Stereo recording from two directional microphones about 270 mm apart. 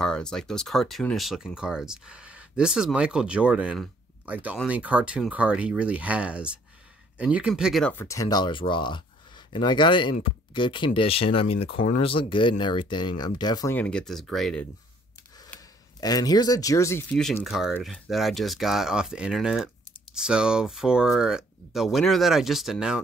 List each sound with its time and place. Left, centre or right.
0.0 s speech: centre
15.4 s speech: centre